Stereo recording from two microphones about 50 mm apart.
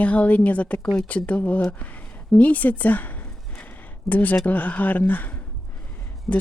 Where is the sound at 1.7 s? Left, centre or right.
Left.